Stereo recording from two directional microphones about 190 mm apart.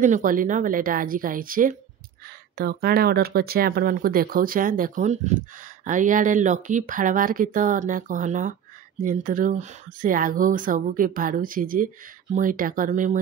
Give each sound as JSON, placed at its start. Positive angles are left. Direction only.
{"t": 0.0, "sound": "speech", "side_deg": -45}